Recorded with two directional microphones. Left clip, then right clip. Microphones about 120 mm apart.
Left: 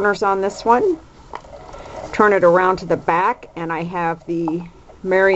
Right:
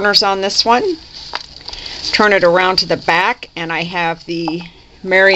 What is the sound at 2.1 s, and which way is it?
A woman's voice, 30° right (ahead or behind).